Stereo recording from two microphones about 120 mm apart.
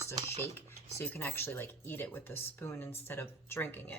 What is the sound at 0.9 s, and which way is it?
Speech, 15° left (ahead or behind).